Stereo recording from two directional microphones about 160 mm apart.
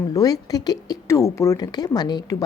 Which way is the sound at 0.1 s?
20° left (ahead or behind).